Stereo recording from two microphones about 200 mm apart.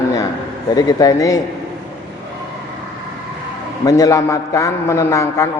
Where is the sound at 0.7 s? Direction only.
20° left (ahead or behind).